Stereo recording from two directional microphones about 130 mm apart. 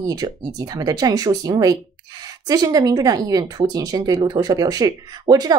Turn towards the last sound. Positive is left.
turn(degrees=-30)  # may be behind; listen again after turning